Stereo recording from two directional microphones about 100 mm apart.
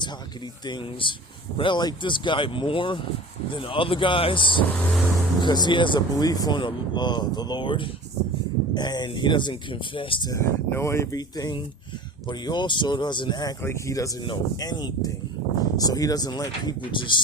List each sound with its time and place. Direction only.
1.0 s speech: 55° left (ahead or behind)
10.2 s speech: 30° left (ahead or behind)
12.3 s speech: 50° left (ahead or behind)
13.6 s speech: 25° left (ahead or behind)
14.5 s speech: 40° left (ahead or behind)